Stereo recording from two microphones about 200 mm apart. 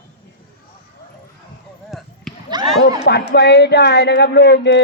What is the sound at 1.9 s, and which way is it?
Basketball bounce, centre (ahead or behind).